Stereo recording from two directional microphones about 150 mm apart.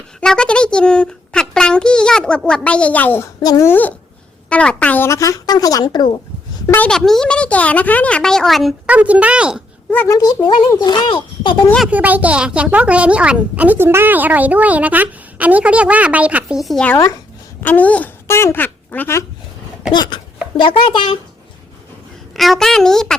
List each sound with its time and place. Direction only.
0.2 s a child's voice: 5° left (ahead or behind)
3.4 s speech: 25° left (ahead or behind)
3.7 s speech: 10° left (ahead or behind); by 6.1 s 30° left (ahead or behind)
6.7 s speech: 10° left (ahead or behind)
8.9 s speech: 10° right (ahead or behind)
9.9 s speech: 10° left (ahead or behind)
10.2 s speech: 30° left (ahead or behind)
11.9 s speech: 10° right (ahead or behind); by 19.2 s 15° left (ahead or behind)
19.9 s a child's voice: 30° left (ahead or behind)
22.4 s a child's voice: centre (ahead or behind)